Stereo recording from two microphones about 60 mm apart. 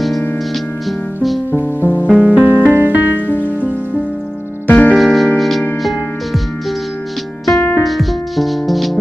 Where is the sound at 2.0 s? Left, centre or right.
Centre.